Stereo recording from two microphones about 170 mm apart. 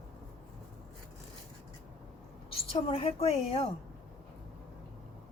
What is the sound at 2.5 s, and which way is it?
Speech, 30° left (ahead or behind).